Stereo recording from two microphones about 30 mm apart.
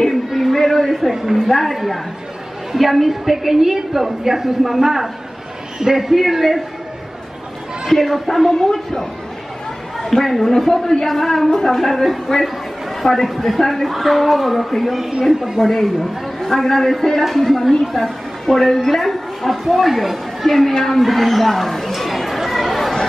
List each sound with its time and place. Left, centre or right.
0.1 s a sound: centre
0.5 s speech: centre
1.1 s a woman's voice: centre
1.5 s a woman's voice: centre
7.9 s speech: centre
8.5 s a man's voice: left
10.2 s speech: centre
10.7 s a man's voice: centre
11.1 s a man's voice: centre
21.0 s speech: centre
21.9 s chatter: centre